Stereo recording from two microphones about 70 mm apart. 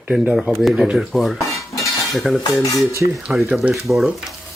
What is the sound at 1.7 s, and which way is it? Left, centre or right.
Cutlery, left.